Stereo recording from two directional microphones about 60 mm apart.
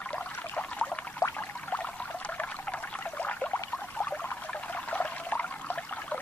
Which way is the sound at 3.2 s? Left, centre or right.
Left.